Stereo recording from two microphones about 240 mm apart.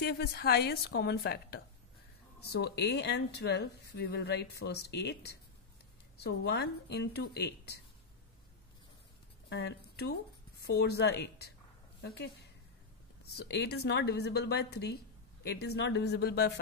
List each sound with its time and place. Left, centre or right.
0.0 s a woman's voice: left
9.5 s speech: left
13.4 s speech: left